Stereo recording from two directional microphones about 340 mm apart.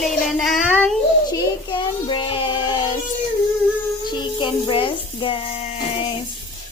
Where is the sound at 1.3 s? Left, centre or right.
Centre.